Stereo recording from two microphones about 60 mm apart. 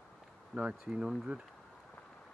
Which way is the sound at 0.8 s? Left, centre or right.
Centre.